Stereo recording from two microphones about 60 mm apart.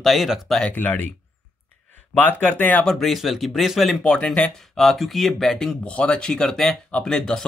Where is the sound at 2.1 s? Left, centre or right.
Left.